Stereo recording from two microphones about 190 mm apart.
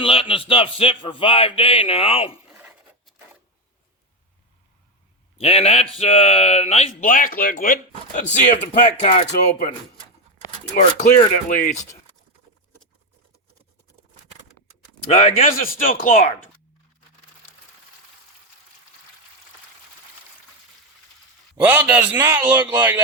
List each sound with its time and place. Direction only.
0.0 s speech: 30° left (ahead or behind)
5.4 s speech: 30° left (ahead or behind)
10.8 s speech: 40° left (ahead or behind)
15.1 s speech: 35° left (ahead or behind)
21.7 s a man's voice: 10° right (ahead or behind)